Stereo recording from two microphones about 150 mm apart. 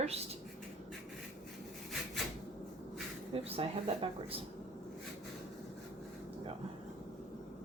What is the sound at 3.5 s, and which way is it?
Speech, 40° right (ahead or behind).